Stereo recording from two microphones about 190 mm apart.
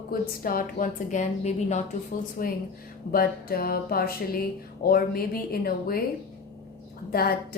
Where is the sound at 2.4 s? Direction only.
50° left (ahead or behind).